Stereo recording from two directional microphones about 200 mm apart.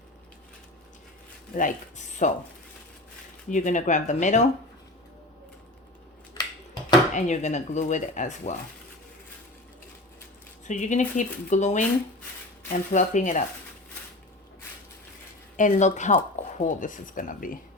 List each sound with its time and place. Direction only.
1.5 s speech: 40° left (ahead or behind)
3.5 s speech: 40° left (ahead or behind)
7.1 s speech: 35° left (ahead or behind)
10.7 s speech: 40° left (ahead or behind)
15.5 s speech: 40° left (ahead or behind)